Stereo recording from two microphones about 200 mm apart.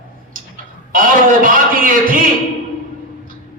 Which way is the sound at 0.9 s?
45° right (ahead or behind).